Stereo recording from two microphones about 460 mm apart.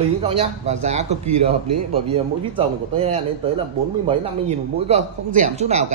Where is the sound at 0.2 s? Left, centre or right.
Centre.